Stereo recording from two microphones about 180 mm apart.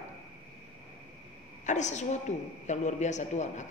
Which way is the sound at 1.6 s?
40° left (ahead or behind).